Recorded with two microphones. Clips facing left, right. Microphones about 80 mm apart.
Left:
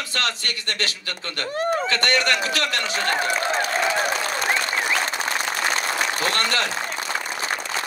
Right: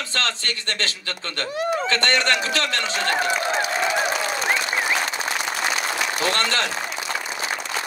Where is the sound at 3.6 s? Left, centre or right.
Left.